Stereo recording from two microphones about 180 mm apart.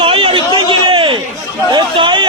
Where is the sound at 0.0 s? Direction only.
30° right (ahead or behind).